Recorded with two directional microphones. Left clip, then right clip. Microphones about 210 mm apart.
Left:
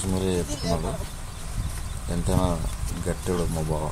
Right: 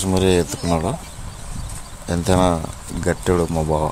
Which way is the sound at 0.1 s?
25° right (ahead or behind).